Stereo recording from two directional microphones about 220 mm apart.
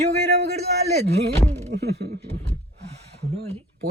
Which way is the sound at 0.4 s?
45° right (ahead or behind).